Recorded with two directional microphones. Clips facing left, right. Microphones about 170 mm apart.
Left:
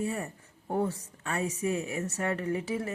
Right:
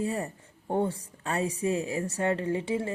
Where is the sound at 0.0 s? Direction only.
30° right (ahead or behind).